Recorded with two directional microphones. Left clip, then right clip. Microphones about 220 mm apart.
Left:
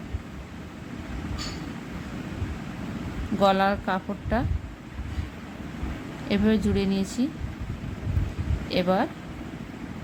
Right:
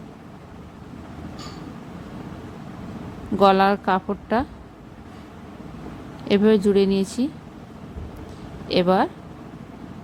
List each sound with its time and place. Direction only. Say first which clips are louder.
3.4 s a woman's voice: right 5 dB; 20° right (ahead or behind)
6.2 s a woman's voice: right 8 dB; 20° right (ahead or behind)
8.7 s a woman's voice: right 5 dB; 20° right (ahead or behind)